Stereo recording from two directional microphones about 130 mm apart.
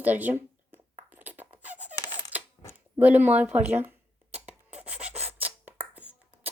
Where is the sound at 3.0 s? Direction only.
10° right (ahead or behind).